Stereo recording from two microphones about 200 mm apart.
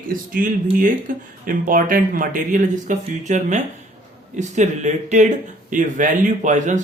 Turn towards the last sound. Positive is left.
turn(degrees=-40)  # may be behind; listen again after turning